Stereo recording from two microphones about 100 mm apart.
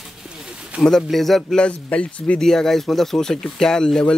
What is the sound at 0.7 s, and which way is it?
Speech, 5° left (ahead or behind).